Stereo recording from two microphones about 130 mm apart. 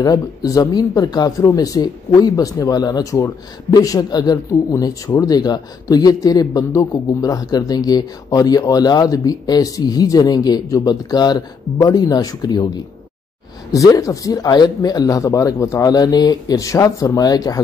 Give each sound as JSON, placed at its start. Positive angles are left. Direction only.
{"t": 0.0, "sound": "speech", "side_deg": 30}
{"t": 13.7, "sound": "speech", "side_deg": 25}